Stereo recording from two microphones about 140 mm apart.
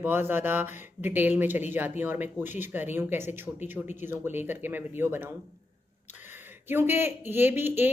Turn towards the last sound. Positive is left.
turn(degrees=-15)  # may be behind; listen again after turning